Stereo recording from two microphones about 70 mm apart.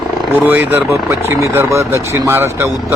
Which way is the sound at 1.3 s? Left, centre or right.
Right.